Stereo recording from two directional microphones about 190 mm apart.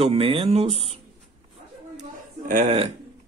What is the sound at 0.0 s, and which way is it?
Speech, 30° right (ahead or behind).